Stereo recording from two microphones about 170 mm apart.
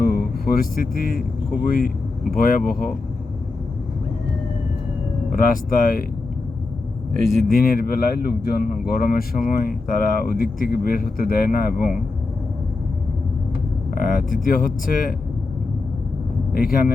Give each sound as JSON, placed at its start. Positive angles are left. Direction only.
{"t": 0.0, "sound": "speech", "side_deg": 60}
{"t": 5.3, "sound": "speech", "side_deg": 55}
{"t": 7.2, "sound": "speech", "side_deg": 0}
{"t": 7.4, "sound": "speech", "side_deg": 55}
{"t": 13.9, "sound": "speech", "side_deg": 55}
{"t": 16.6, "sound": "speech", "side_deg": 60}